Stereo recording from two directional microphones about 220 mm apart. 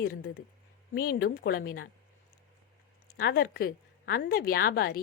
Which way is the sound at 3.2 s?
45° left (ahead or behind).